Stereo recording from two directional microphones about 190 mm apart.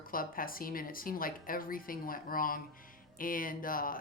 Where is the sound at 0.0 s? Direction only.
50° left (ahead or behind).